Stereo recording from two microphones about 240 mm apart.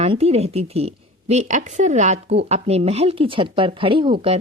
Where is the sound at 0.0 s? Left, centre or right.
Right.